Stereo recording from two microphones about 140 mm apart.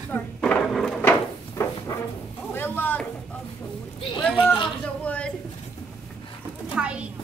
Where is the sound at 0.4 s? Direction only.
5° left (ahead or behind).